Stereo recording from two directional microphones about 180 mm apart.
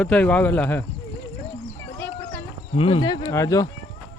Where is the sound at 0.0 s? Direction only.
5° left (ahead or behind).